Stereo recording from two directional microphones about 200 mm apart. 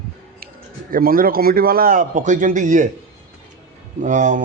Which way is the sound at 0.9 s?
45° right (ahead or behind).